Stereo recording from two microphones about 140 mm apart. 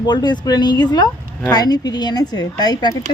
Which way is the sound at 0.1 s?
30° left (ahead or behind).